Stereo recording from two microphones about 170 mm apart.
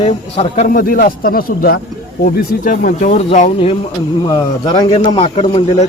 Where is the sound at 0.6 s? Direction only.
55° left (ahead or behind); by 3.8 s 40° left (ahead or behind).